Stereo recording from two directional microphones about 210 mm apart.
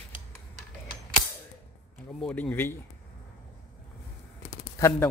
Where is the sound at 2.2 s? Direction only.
5° left (ahead or behind).